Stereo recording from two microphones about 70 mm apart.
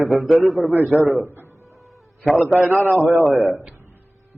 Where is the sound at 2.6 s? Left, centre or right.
Right.